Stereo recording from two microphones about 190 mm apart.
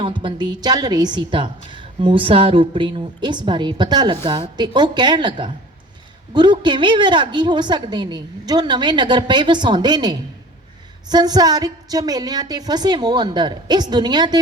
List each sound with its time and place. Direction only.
0.0 s a woman's voice: 25° right (ahead or behind)